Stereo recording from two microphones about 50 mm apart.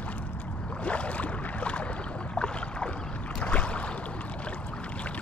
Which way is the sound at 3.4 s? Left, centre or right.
Left.